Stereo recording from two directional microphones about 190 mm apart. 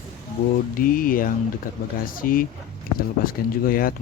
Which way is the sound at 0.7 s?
50° left (ahead or behind).